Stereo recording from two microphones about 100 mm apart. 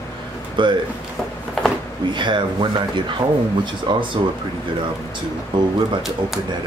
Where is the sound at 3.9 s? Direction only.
50° right (ahead or behind).